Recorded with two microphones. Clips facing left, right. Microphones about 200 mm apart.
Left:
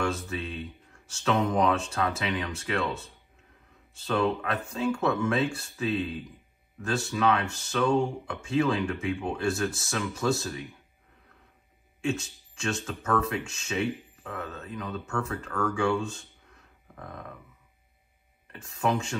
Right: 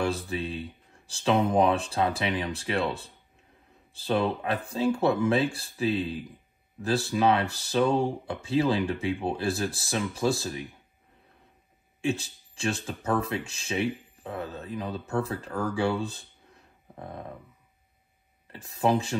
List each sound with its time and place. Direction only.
0.0 s speech: 30° right (ahead or behind)
12.0 s speech: 30° right (ahead or behind)
16.9 s a sound: 30° right (ahead or behind)
18.5 s speech: 30° right (ahead or behind)